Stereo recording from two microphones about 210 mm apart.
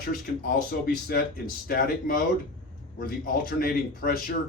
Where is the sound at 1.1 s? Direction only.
45° left (ahead or behind).